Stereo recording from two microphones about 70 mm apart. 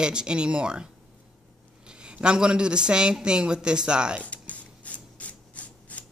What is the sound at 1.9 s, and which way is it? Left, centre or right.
A man's voice, centre.